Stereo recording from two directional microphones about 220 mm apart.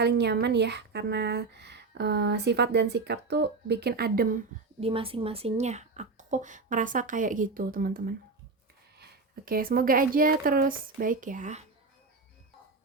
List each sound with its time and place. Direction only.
0.0 s speech: 50° right (ahead or behind)
4.8 s speech: 25° right (ahead or behind)